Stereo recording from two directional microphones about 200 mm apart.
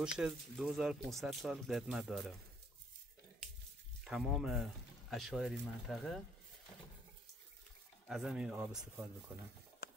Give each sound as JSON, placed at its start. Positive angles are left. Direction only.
{"t": 0.2, "sound": "speech", "side_deg": 0}
{"t": 4.0, "sound": "speech", "side_deg": 0}
{"t": 8.1, "sound": "speech", "side_deg": 0}
{"t": 9.8, "sound": "a sound", "side_deg": 50}